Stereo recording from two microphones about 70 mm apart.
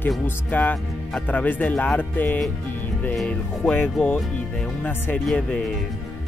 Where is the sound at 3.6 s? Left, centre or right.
Left.